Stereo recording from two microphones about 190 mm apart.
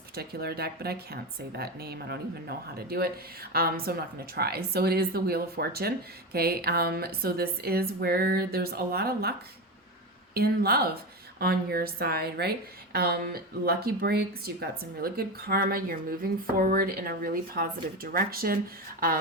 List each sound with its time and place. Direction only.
0.2 s a woman's voice: 55° right (ahead or behind)
10.3 s a woman's voice: 55° right (ahead or behind)